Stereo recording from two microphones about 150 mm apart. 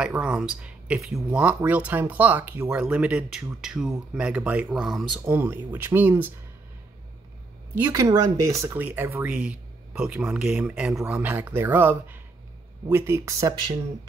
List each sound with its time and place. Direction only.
0.0 s speech: 10° right (ahead or behind)
5.3 s speech: 15° right (ahead or behind)
7.7 s speech: 20° right (ahead or behind)